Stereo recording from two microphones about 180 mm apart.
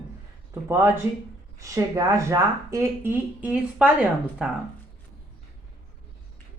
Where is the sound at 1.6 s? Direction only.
15° right (ahead or behind).